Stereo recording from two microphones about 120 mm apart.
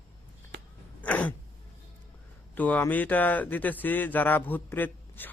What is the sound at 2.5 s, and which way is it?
Speech, 15° left (ahead or behind).